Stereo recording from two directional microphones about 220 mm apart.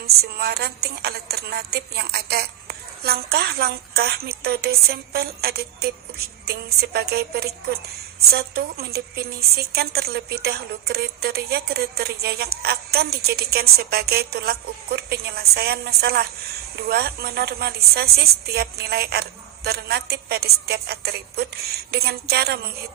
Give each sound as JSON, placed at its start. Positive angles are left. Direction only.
{"t": 0.0, "sound": "a woman's voice", "side_deg": -45}